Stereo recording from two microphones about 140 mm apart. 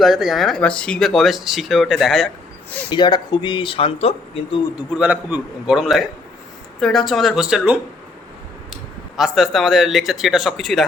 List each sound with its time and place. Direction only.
0.0 s speech: centre (ahead or behind)
2.9 s speech: 30° left (ahead or behind)
4.9 s a man's voice: 10° right (ahead or behind)
5.7 s speech: centre (ahead or behind)